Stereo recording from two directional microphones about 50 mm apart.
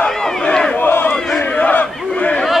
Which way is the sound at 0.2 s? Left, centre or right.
Centre.